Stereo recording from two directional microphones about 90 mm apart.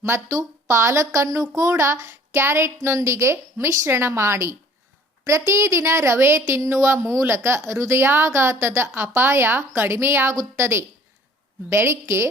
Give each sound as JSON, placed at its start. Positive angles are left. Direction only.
{"t": 0.0, "sound": "a woman's voice", "side_deg": -35}